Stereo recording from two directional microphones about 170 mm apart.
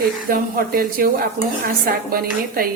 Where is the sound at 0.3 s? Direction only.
60° right (ahead or behind).